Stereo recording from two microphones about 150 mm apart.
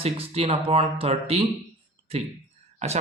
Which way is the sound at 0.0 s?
40° right (ahead or behind).